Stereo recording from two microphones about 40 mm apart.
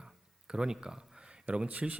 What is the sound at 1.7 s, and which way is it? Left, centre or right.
Speech, right.